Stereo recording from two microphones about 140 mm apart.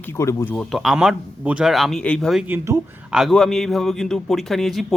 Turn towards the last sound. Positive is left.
turn(degrees=0)  # may be behind; listen again after turning